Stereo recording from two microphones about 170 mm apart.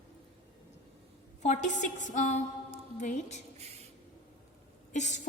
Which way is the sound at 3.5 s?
40° right (ahead or behind).